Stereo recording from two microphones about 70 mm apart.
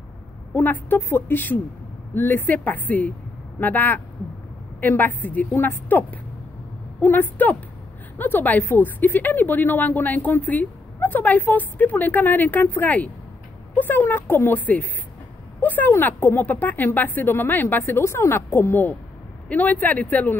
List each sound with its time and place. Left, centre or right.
0.6 s a woman's voice: left
19.5 s speech: left